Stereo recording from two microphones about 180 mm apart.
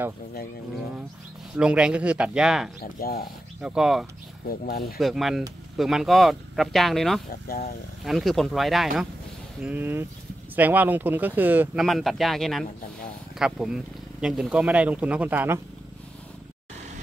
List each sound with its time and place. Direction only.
1.6 s speech: 5° right (ahead or behind)
2.8 s speech: 55° left (ahead or behind)
3.6 s speech: 5° right (ahead or behind)
4.5 s speech: 55° left (ahead or behind)
4.9 s speech: centre (ahead or behind)
7.4 s speech: 55° left (ahead or behind)
8.0 s speech: centre (ahead or behind)
11.8 s speech: centre (ahead or behind)